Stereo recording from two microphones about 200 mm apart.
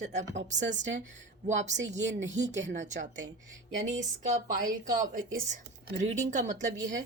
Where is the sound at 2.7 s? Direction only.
40° right (ahead or behind).